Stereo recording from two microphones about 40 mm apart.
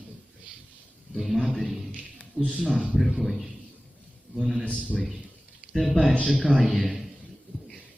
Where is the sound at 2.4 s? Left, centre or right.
Left.